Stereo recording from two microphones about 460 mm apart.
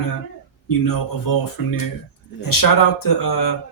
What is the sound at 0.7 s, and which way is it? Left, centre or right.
Speech, left.